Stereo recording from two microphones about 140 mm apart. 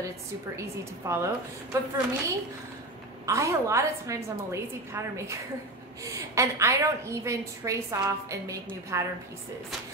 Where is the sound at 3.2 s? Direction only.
20° right (ahead or behind).